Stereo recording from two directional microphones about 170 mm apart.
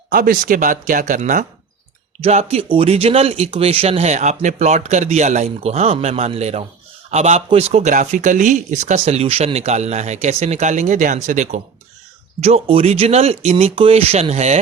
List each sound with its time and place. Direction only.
0.1 s speech: 55° right (ahead or behind); by 14.6 s 40° right (ahead or behind)